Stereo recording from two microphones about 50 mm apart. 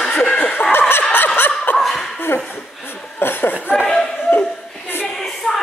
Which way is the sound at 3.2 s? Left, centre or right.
Left.